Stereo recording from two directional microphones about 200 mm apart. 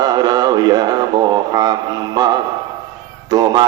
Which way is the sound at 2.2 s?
20° right (ahead or behind).